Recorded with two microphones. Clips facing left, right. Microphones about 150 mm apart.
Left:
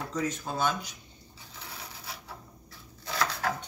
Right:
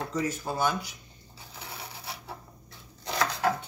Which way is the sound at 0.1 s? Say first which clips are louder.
Left 1 dB; 10° right (ahead or behind).